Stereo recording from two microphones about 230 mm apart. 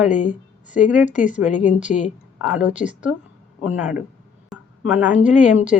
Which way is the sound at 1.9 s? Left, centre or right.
Left.